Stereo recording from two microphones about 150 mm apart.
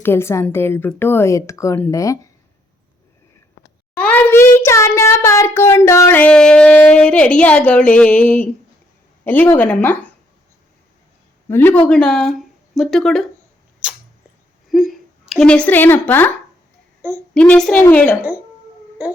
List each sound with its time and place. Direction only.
0.0 s a child's voice: 15° left (ahead or behind)
3.9 s a child's voice: 10° left (ahead or behind)
11.4 s a child's voice: 15° left (ahead or behind)
14.7 s a sound: centre (ahead or behind)
17.3 s a child's voice: 5° left (ahead or behind)
19.0 s speech: 10° right (ahead or behind)